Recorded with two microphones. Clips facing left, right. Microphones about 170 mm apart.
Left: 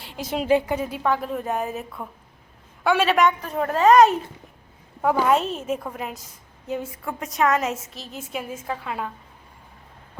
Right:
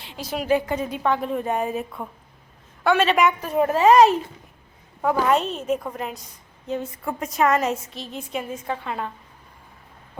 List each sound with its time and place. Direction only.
0.3 s a woman's voice: 25° left (ahead or behind)
0.6 s a woman's voice: 10° left (ahead or behind)
3.2 s a woman's voice: 5° right (ahead or behind)